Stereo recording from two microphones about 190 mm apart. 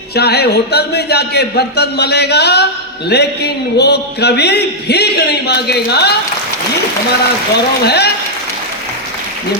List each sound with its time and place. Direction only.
0.2 s a man's voice: 60° left (ahead or behind)
7.9 s a man's voice: 60° left (ahead or behind)